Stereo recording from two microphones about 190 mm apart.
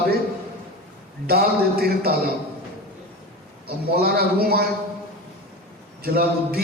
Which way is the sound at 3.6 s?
55° right (ahead or behind).